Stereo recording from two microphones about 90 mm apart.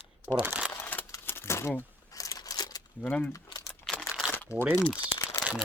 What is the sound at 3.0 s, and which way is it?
Speech, 15° left (ahead or behind).